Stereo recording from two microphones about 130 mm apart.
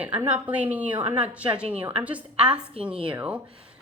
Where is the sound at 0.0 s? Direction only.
10° right (ahead or behind).